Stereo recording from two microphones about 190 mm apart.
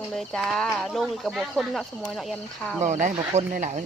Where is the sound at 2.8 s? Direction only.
40° right (ahead or behind).